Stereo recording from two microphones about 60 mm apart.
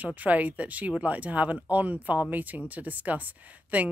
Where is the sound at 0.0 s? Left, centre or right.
Right.